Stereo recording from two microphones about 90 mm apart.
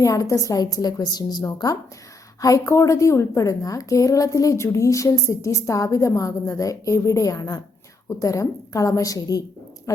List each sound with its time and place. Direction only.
0.0 s a woman's voice: 40° left (ahead or behind)